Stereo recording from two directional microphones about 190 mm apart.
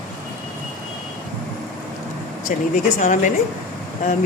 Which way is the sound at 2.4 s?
40° left (ahead or behind).